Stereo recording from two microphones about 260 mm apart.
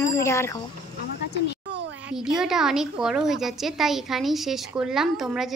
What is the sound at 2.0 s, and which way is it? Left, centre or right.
A woman's voice, centre.